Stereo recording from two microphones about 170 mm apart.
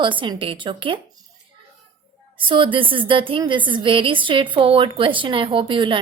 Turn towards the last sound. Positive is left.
turn(degrees=-30)  # may be behind; listen again after turning